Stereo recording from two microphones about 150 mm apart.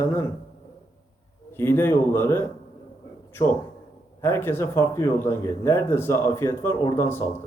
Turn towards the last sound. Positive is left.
turn(degrees=15)  # may be behind; listen again after turning